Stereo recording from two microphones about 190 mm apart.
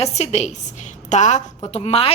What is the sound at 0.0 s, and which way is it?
A woman's voice, 35° left (ahead or behind).